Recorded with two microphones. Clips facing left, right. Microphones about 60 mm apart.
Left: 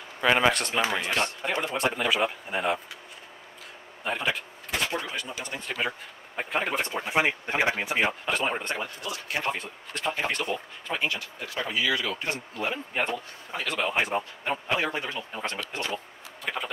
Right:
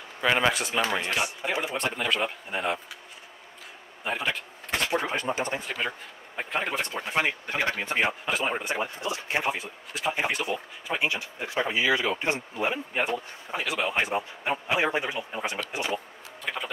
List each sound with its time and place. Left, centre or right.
0.2 s speech: centre
4.0 s speech: centre
5.0 s speech: right
5.6 s speech: centre
8.7 s speech: right
9.5 s a man's voice: centre
11.0 s a man's voice: centre
16.4 s speech: centre